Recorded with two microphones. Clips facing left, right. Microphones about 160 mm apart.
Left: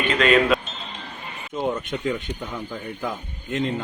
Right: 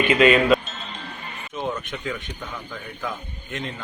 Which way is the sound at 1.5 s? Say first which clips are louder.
Left 4 dB; 20° left (ahead or behind).